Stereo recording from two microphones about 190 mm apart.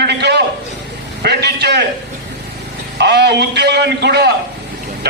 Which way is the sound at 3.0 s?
60° right (ahead or behind).